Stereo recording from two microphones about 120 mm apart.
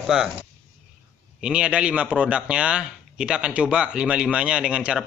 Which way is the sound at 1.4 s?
10° right (ahead or behind).